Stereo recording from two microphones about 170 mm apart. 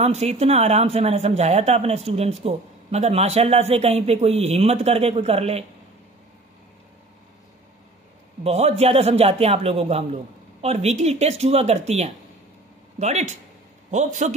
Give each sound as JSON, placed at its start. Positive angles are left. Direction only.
{"t": 0.0, "sound": "a man's voice", "side_deg": -40}
{"t": 8.5, "sound": "a man's voice", "side_deg": -40}
{"t": 13.8, "sound": "a man's voice", "side_deg": -45}